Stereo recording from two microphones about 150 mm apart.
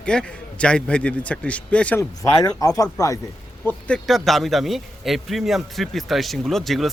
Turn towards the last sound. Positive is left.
turn(degrees=0)  # may be behind; listen again after turning